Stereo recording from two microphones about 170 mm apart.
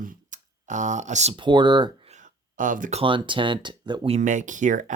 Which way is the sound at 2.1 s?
50° right (ahead or behind).